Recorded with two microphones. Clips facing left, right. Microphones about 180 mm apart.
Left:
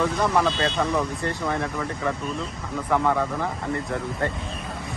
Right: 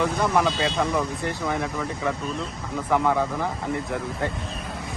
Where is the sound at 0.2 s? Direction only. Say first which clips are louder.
Even; 5° right (ahead or behind).